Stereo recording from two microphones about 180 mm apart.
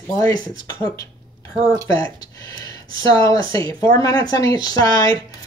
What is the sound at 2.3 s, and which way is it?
Gasp, 20° left (ahead or behind).